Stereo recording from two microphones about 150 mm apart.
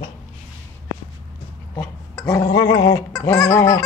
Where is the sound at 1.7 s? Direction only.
25° left (ahead or behind).